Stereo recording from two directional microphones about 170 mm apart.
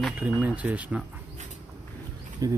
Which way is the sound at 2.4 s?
20° right (ahead or behind).